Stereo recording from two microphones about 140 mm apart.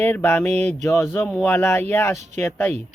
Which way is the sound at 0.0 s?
15° left (ahead or behind).